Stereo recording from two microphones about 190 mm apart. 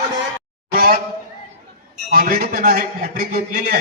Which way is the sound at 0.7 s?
50° right (ahead or behind).